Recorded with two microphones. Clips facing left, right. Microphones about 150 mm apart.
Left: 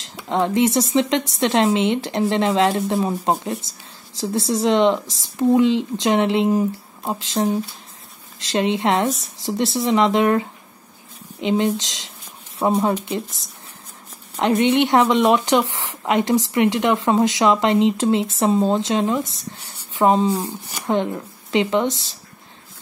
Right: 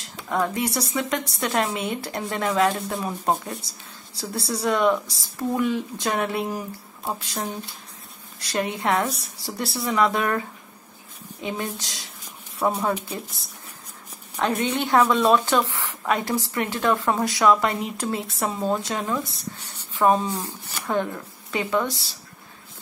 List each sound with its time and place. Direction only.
0.3 s speech: 25° left (ahead or behind)
11.4 s speech: 25° left (ahead or behind)
14.4 s speech: 20° left (ahead or behind)